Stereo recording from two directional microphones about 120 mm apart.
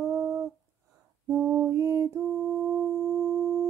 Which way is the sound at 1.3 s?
20° right (ahead or behind).